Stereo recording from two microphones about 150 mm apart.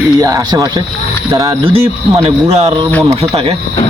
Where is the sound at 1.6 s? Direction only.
40° right (ahead or behind).